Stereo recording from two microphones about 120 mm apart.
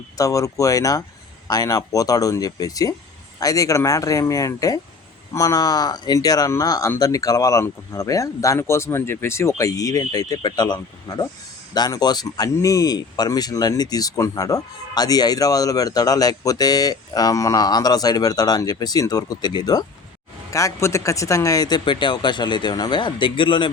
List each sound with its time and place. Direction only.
0.2 s speech: 25° left (ahead or behind); by 23.7 s 40° left (ahead or behind)